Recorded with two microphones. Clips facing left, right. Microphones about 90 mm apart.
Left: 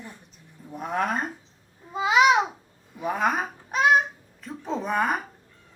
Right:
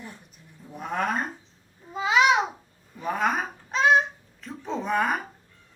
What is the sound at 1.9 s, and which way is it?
Babbling, 10° left (ahead or behind).